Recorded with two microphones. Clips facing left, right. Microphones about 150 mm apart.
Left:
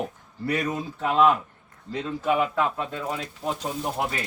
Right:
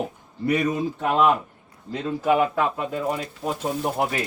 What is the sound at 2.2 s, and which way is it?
Speech, 50° right (ahead or behind).